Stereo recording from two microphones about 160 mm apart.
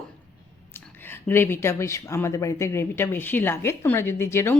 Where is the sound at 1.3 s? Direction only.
15° left (ahead or behind).